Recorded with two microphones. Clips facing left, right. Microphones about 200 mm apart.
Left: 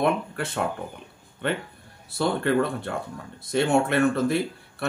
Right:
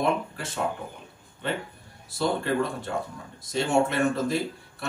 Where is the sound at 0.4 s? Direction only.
60° left (ahead or behind).